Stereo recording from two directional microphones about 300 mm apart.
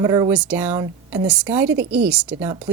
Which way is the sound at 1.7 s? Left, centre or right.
Right.